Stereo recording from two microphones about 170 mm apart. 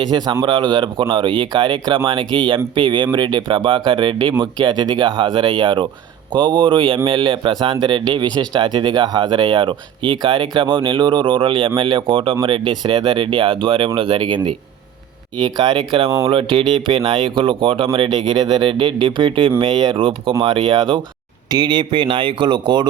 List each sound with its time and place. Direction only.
0.0 s speech: 25° right (ahead or behind)
15.4 s speech: 30° right (ahead or behind)